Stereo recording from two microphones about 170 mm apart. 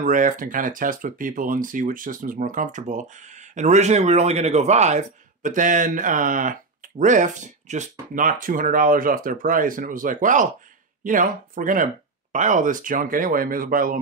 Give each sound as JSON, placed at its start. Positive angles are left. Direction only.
{"t": 0.0, "sound": "a man's voice", "side_deg": -50}